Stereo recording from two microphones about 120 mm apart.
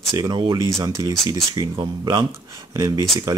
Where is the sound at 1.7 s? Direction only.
40° right (ahead or behind).